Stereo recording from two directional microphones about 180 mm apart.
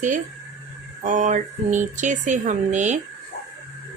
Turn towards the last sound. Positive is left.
turn(degrees=-40)  # may be behind; listen again after turning